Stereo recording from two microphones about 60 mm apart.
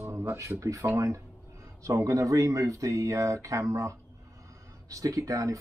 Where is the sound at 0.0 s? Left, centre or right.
Right.